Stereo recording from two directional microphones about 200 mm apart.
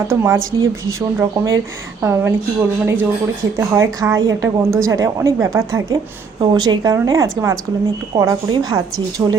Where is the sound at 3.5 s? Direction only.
15° right (ahead or behind).